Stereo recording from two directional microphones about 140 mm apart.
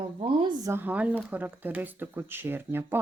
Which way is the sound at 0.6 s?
15° right (ahead or behind).